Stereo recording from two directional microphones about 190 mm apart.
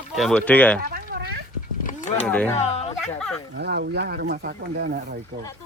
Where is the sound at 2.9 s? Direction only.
Centre (ahead or behind).